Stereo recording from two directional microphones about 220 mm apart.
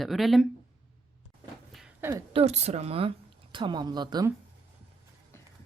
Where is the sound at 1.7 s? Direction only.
5° right (ahead or behind).